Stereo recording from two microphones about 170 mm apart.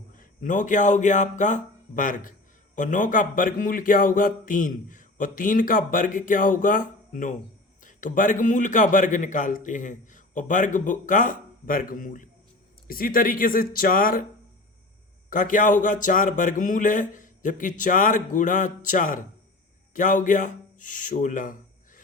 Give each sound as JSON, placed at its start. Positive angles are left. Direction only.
{"t": 0.2, "sound": "a man's voice", "side_deg": 50}
{"t": 15.3, "sound": "a man's voice", "side_deg": 50}